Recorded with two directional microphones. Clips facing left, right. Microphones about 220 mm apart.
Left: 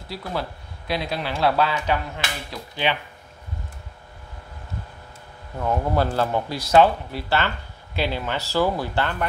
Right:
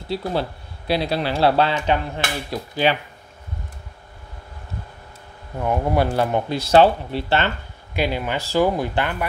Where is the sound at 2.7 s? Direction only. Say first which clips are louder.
Right 5 dB; 40° right (ahead or behind).